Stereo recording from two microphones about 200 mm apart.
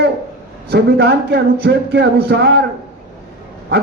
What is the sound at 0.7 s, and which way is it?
A man's voice, 55° right (ahead or behind).